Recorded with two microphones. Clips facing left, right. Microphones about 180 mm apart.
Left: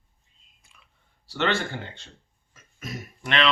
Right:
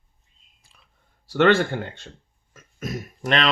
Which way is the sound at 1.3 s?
55° right (ahead or behind).